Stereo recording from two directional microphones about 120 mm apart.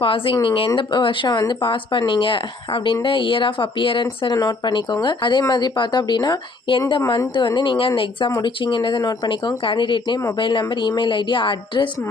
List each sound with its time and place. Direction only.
0.0 s speech: 50° left (ahead or behind)